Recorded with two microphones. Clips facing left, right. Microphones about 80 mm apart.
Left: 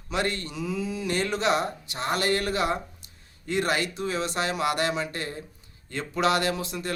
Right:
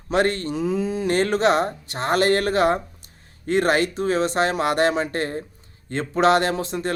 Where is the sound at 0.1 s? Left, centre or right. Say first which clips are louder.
Right 8 dB; right.